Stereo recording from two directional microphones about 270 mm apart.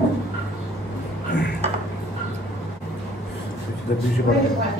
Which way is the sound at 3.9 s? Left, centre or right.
Left.